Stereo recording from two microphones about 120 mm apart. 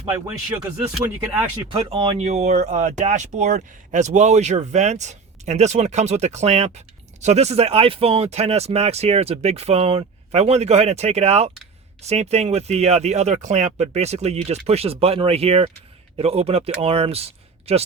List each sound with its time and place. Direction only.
1.7 s speech: 50° right (ahead or behind); by 13.8 s 75° right (ahead or behind)
13.8 s speech: 65° right (ahead or behind)